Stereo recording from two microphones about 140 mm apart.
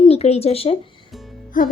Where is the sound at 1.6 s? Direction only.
70° left (ahead or behind).